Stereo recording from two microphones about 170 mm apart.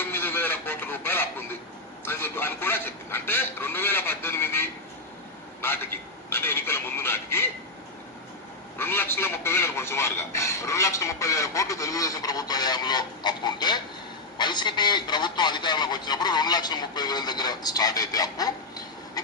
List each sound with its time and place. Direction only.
0.0 s a sound: 10° left (ahead or behind)
2.0 s speech: 15° left (ahead or behind)
8.8 s speech: 15° left (ahead or behind)
19.2 s rail transport: 20° left (ahead or behind)